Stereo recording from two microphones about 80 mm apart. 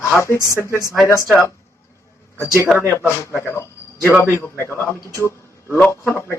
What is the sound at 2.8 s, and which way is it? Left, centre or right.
A man's voice, left.